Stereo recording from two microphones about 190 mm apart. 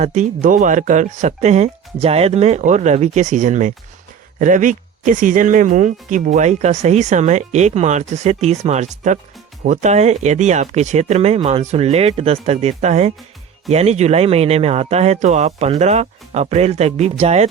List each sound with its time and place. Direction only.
0.0 s speech: 40° right (ahead or behind)